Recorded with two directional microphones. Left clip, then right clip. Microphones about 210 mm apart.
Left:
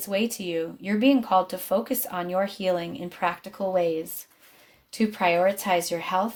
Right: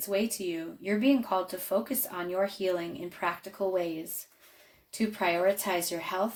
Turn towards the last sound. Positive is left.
turn(degrees=40)  # may be behind; listen again after turning